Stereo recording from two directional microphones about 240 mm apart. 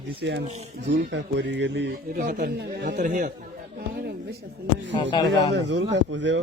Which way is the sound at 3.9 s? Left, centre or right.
Right.